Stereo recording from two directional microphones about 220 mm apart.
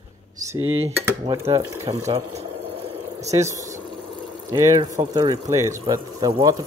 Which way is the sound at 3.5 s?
35° right (ahead or behind).